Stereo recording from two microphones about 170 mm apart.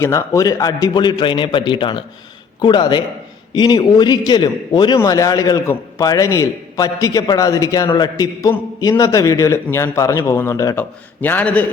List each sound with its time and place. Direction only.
0.0 s a man's voice: 15° left (ahead or behind)